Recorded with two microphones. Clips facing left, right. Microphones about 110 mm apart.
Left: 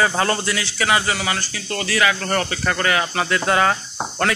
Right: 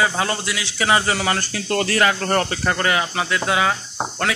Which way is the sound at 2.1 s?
35° right (ahead or behind).